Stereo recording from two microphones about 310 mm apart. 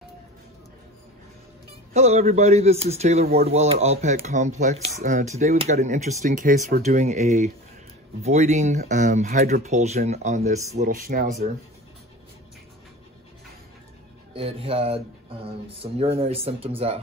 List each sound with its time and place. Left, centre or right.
2.0 s speech: right
14.3 s speech: centre